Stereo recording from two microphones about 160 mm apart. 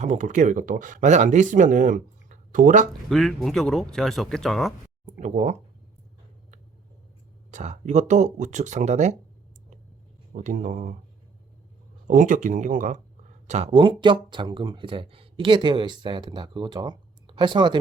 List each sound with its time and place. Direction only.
0.0 s speech: 50° right (ahead or behind)
3.1 s speech: centre (ahead or behind)
5.2 s speech: 45° right (ahead or behind)
7.5 s speech: 45° right (ahead or behind)
10.3 s speech: 55° right (ahead or behind)
12.0 s speech: 55° right (ahead or behind)
13.5 s speech: 40° right (ahead or behind)